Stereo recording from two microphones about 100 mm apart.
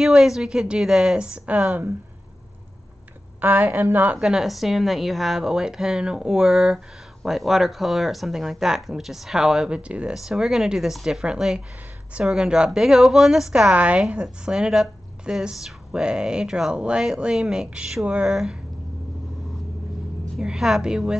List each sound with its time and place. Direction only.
0.0 s a woman's voice: 5° right (ahead or behind)
3.3 s a woman's voice: 20° right (ahead or behind)
4.2 s a woman's voice: 5° right (ahead or behind)
20.3 s a woman's voice: 5° right (ahead or behind)